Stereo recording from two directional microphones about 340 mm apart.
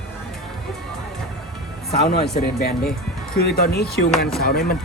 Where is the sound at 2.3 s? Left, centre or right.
Left.